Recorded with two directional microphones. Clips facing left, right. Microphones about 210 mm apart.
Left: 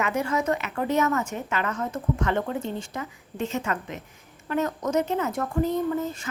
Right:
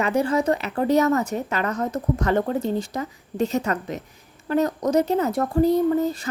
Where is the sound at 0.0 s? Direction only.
35° right (ahead or behind).